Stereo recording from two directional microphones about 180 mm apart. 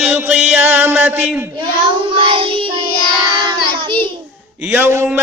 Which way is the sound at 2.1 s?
30° right (ahead or behind).